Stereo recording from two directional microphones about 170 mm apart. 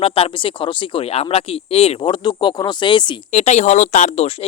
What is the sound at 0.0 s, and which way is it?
Speech, 35° left (ahead or behind).